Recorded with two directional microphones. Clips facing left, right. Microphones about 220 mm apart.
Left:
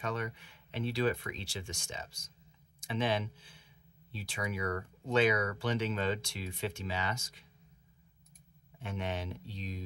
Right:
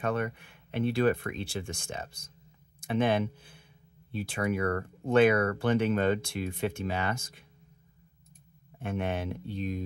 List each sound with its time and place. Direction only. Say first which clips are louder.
0.0 s speech: right 7 dB; 55° right (ahead or behind)
8.7 s speech: right 6 dB; 55° right (ahead or behind)